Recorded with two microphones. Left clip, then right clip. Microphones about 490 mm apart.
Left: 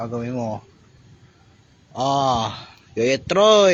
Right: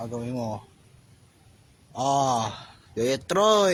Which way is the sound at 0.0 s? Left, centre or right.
Right.